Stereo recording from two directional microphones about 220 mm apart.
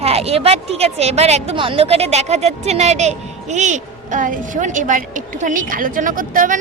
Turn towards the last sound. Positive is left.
turn(degrees=-40)  # may be behind; listen again after turning